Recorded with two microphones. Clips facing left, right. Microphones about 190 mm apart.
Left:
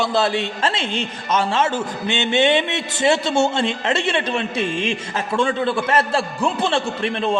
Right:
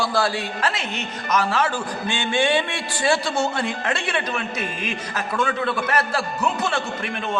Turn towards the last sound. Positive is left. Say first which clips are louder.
# left 6 dB
turn(degrees=30)  # may be behind; listen again after turning